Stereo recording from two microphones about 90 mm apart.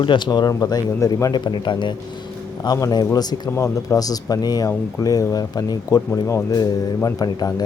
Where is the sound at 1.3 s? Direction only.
60° left (ahead or behind).